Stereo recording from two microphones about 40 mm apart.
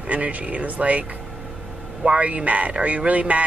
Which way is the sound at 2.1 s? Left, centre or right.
Right.